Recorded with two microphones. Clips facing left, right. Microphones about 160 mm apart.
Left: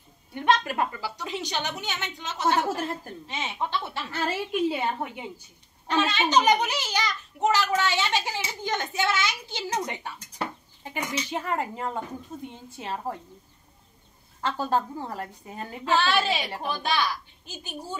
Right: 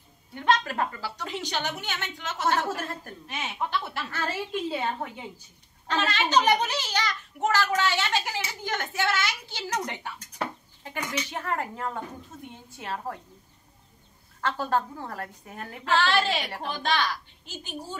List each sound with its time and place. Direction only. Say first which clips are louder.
0.3 s a child's voice: left 1 dB; 20° left (ahead or behind)
10.8 s a child's voice: left 1 dB; 15° left (ahead or behind)
14.4 s a child's voice: left 1 dB; 20° left (ahead or behind)